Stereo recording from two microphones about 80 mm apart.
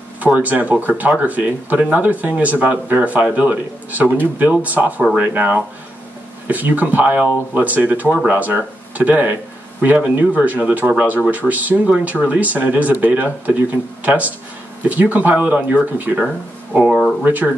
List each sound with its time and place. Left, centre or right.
0.2 s speech: centre
16.7 s speech: centre
17.2 s speech: right